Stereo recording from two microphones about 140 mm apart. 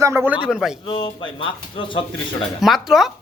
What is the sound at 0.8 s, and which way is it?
Speech, 35° left (ahead or behind).